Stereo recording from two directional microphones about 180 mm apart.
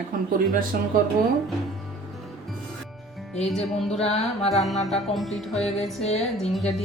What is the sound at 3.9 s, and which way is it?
Speech, 35° left (ahead or behind).